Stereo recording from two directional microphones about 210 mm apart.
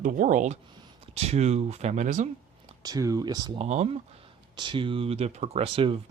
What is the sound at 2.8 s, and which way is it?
Speech, 15° right (ahead or behind).